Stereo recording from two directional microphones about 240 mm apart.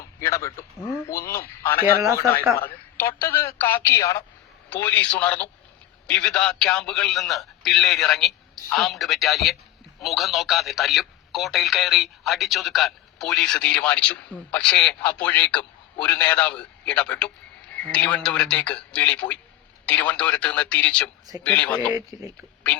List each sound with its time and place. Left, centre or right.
0.2 s speech: centre
2.1 s speech: centre
2.6 s telephone: centre
3.2 s speech: centre
21.8 s speech: centre